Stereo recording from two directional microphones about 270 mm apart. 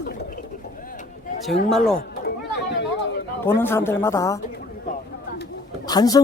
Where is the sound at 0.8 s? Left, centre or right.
Left.